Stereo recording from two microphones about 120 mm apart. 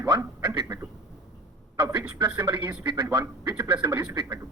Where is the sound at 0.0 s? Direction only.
30° right (ahead or behind).